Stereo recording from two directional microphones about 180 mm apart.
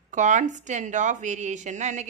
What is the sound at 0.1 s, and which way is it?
A woman's voice, 45° right (ahead or behind).